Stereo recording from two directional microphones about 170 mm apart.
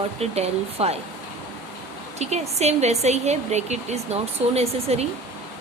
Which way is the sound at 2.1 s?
40° right (ahead or behind).